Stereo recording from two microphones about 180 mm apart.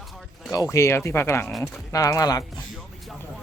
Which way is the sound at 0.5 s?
20° left (ahead or behind).